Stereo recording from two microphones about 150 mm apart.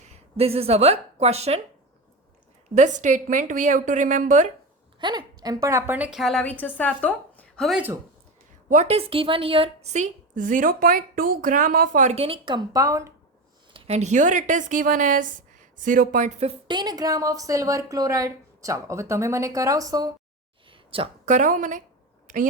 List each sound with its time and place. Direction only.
0.1 s speech: 40° right (ahead or behind)
2.7 s a woman's voice: 55° right (ahead or behind)
4.9 s a woman's voice: 30° right (ahead or behind); by 7.8 s 5° left (ahead or behind)
8.7 s a woman's voice: 45° right (ahead or behind); by 13.1 s 20° right (ahead or behind)
13.7 s a woman's voice: 45° right (ahead or behind)
16.6 s a woman's voice: 30° right (ahead or behind)
20.7 s a sound: 35° right (ahead or behind)
21.2 s a woman's voice: 55° right (ahead or behind)